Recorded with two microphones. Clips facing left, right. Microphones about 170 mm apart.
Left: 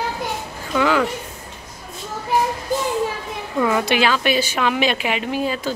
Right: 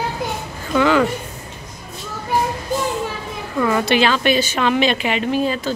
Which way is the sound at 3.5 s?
10° left (ahead or behind).